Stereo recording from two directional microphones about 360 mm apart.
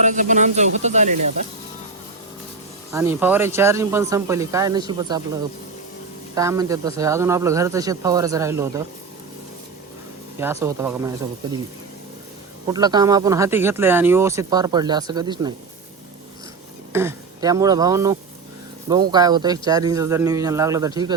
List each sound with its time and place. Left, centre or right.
0.0 s speech: right
2.9 s speech: centre
6.3 s speech: centre
10.4 s speech: centre
12.7 s speech: centre
16.9 s speech: centre